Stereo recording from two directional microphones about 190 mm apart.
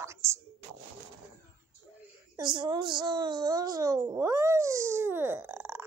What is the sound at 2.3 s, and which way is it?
Speech, 25° right (ahead or behind).